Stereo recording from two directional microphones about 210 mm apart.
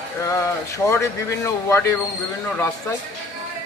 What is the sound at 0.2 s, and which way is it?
A man's voice, 15° left (ahead or behind).